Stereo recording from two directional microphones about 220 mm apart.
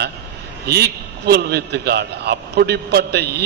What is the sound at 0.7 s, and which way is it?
A man's voice, 45° right (ahead or behind).